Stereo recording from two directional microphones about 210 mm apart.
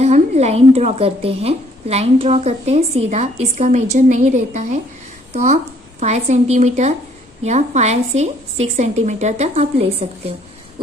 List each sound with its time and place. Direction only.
0.0 s a woman's voice: 30° right (ahead or behind)